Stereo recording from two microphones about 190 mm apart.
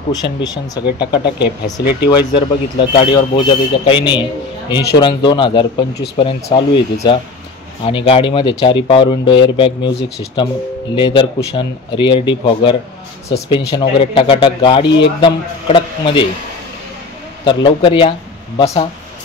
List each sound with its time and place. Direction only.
0.1 s a man's voice: 20° left (ahead or behind)
1.2 s speech: 60° left (ahead or behind)
2.0 s a man's voice: 20° left (ahead or behind)
9.8 s speech: 70° left (ahead or behind)
11.0 s a man's voice: 25° left (ahead or behind)
17.5 s a man's voice: 25° left (ahead or behind)